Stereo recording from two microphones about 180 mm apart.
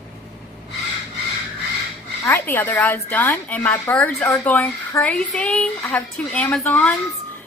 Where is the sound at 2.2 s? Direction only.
15° left (ahead or behind).